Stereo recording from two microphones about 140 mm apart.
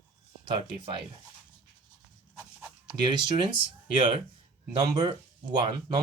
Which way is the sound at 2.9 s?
30° right (ahead or behind).